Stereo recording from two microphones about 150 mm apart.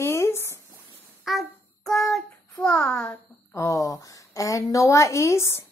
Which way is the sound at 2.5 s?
5° left (ahead or behind).